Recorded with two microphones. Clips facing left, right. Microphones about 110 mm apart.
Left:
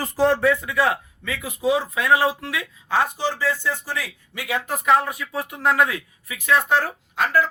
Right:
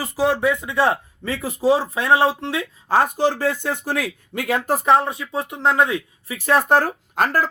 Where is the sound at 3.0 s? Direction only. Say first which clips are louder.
Right 4 dB; 50° right (ahead or behind).